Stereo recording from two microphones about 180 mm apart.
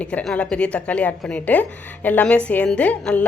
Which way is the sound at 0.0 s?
5° left (ahead or behind).